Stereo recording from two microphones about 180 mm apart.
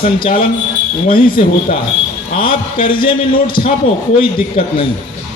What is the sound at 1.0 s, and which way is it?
Speech, 50° left (ahead or behind).